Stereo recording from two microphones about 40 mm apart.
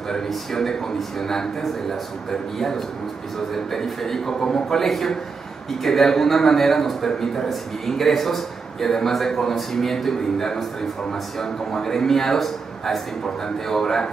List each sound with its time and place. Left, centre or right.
0.3 s a man's voice: centre
3.5 s a man's voice: centre